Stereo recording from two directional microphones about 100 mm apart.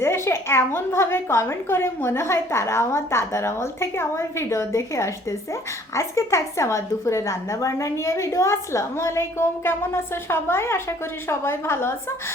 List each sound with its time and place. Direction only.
0.0 s a woman's voice: 25° left (ahead or behind)